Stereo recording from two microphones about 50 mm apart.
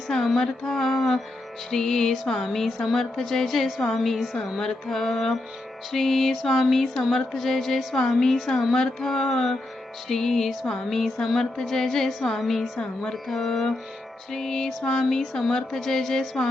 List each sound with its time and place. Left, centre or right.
0.1 s speech: centre
2.8 s music: centre
4.6 s speech: centre
5.9 s music: centre
7.9 s speech: centre
12.8 s speech: centre
13.2 s music: centre
14.3 s speech: centre
15.2 s speech: centre